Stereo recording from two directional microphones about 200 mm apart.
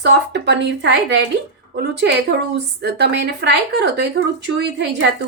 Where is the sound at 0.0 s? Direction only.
60° right (ahead or behind).